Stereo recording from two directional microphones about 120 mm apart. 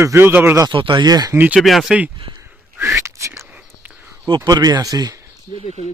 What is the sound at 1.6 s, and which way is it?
Speech, centre (ahead or behind).